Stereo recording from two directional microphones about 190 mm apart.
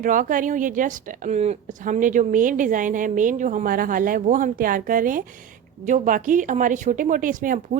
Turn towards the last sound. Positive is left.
turn(degrees=-45)  # may be behind; listen again after turning